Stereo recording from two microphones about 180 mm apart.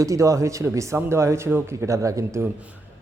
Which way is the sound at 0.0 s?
15° right (ahead or behind).